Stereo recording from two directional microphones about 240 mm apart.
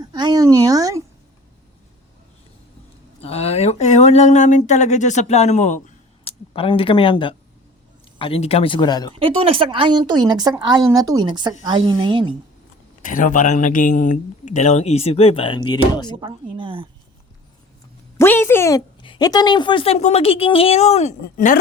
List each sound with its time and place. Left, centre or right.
0.0 s a sound: centre
3.2 s a woman's voice: left
9.1 s a woman's voice: right
13.0 s a woman's voice: left; by 16.1 s centre
16.1 s a woman's voice: right
18.2 s a woman's voice: centre; by 21.6 s left